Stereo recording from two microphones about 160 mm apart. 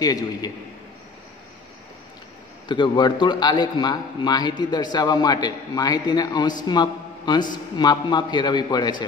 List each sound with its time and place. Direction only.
0.0 s a man's voice: 25° left (ahead or behind)
2.7 s a man's voice: 30° left (ahead or behind)